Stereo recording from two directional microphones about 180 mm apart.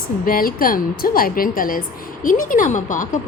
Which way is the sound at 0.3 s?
50° left (ahead or behind).